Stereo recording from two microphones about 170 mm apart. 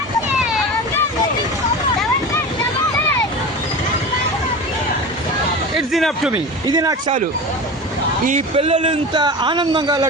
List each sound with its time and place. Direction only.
5.7 s a sound: centre (ahead or behind)
6.3 s a man's voice: 20° right (ahead or behind)
8.5 s a man's voice: 35° right (ahead or behind)